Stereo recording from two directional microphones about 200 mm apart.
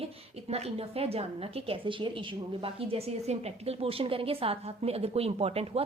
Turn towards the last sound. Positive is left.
turn(degrees=-30)  # may be behind; listen again after turning